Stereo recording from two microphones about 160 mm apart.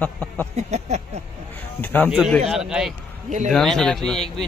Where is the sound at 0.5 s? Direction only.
45° right (ahead or behind).